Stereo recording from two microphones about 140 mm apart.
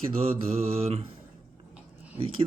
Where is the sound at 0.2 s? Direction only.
45° right (ahead or behind).